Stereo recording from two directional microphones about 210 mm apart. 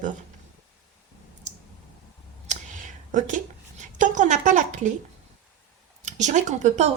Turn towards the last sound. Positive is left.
turn(degrees=-35)  # may be behind; listen again after turning